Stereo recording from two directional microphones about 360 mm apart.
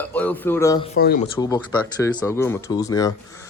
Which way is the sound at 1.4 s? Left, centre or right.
Centre.